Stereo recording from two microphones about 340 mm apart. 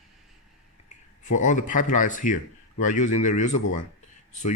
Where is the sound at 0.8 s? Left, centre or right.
Left.